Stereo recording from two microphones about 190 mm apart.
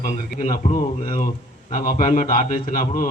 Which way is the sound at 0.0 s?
45° left (ahead or behind).